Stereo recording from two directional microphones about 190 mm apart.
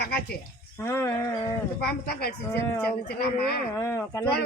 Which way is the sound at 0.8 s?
15° left (ahead or behind).